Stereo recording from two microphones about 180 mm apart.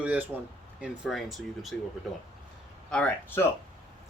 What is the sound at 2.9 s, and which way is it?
Speech, 10° left (ahead or behind).